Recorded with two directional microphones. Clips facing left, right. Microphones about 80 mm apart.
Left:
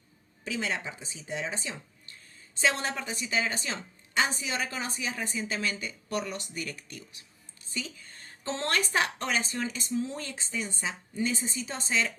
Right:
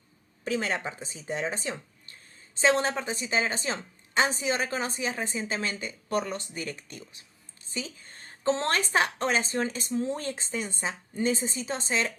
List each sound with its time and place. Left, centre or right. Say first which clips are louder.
0.4 s a woman's voice: right 4 dB; right
2.6 s a woman's voice: right 5 dB; right